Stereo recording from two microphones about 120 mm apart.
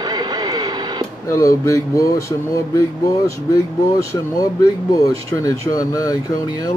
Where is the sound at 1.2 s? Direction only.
25° left (ahead or behind).